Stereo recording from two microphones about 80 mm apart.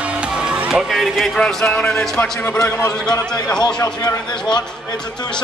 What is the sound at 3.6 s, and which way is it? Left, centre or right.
Speech, left.